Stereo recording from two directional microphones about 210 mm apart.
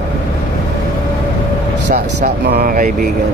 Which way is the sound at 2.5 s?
45° right (ahead or behind).